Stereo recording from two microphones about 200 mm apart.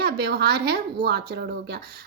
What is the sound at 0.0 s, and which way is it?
A woman's voice, 55° right (ahead or behind).